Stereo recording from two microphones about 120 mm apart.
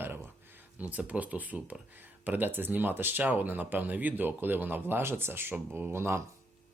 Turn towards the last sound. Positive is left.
turn(degrees=-20)  # may be behind; listen again after turning